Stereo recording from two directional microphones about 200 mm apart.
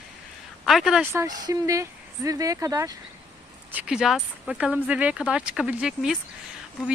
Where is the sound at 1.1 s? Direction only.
15° right (ahead or behind).